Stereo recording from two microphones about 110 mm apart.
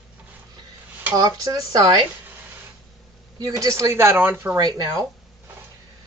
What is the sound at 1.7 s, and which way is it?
Speech, 35° right (ahead or behind).